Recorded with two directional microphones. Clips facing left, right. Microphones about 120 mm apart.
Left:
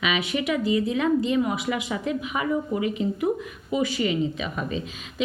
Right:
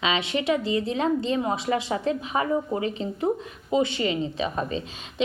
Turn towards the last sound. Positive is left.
turn(degrees=-30)  # may be behind; listen again after turning